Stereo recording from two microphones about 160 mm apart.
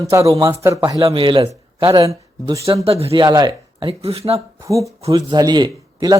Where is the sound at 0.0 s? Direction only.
20° right (ahead or behind).